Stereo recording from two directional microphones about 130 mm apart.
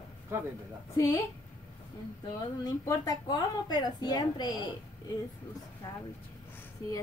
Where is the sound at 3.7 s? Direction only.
30° left (ahead or behind).